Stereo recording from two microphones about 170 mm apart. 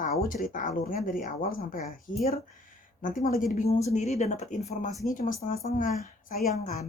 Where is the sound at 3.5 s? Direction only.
40° left (ahead or behind).